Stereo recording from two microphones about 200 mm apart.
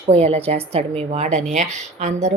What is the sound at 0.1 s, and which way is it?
Speech, 30° right (ahead or behind).